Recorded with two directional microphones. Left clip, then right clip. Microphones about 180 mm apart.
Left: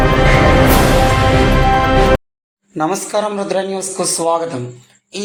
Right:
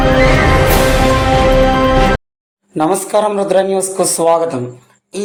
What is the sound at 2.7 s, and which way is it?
A woman's voice, 25° right (ahead or behind).